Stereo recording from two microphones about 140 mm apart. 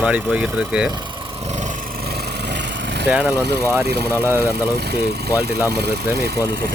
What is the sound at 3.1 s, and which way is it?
Speech, 10° right (ahead or behind).